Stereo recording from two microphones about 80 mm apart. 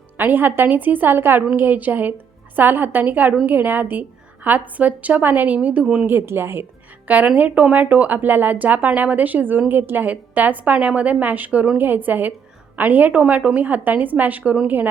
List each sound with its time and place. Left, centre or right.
0.2 s a woman's voice: right
5.8 s speech: centre
6.1 s a woman's voice: right